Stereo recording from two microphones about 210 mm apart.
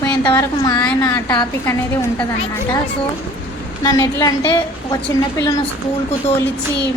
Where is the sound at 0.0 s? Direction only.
15° left (ahead or behind).